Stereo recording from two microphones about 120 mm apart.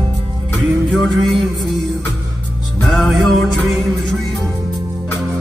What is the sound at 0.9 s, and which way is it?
Music, centre (ahead or behind).